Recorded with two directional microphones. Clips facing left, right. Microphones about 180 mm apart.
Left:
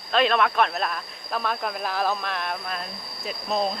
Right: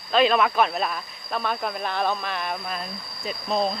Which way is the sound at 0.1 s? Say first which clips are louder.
Right 2 dB; centre (ahead or behind).